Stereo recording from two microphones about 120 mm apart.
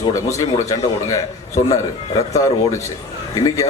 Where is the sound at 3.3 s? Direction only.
30° left (ahead or behind).